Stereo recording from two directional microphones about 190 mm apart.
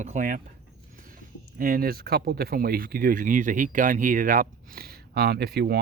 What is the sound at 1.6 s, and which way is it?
Speech, 50° right (ahead or behind).